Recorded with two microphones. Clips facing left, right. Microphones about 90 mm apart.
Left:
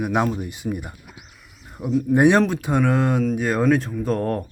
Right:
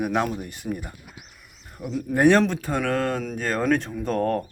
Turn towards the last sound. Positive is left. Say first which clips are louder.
# left 1 dB
turn(degrees=5)  # may be behind; listen again after turning